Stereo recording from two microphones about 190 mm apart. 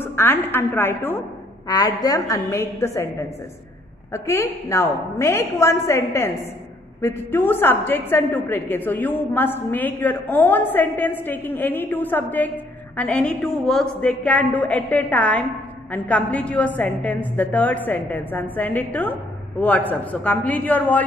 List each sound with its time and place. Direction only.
0.0 s a woman's voice: 10° left (ahead or behind)